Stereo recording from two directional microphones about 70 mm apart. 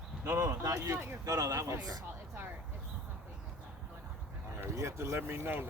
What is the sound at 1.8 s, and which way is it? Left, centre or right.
Speech, right.